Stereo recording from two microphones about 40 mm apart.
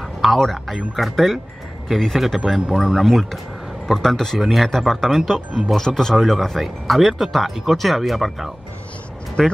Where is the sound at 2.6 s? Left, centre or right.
Centre.